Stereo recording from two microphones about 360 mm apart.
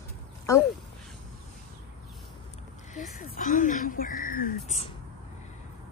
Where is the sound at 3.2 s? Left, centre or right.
Left.